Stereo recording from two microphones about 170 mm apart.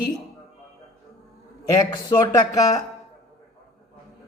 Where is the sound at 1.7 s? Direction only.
25° left (ahead or behind).